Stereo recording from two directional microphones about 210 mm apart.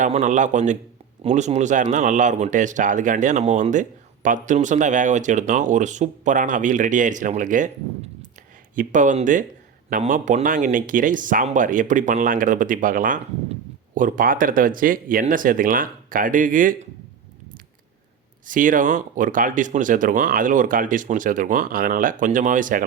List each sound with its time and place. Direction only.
0.0 s speech: 35° right (ahead or behind)
8.7 s speech: 40° right (ahead or behind)
18.4 s speech: 40° right (ahead or behind)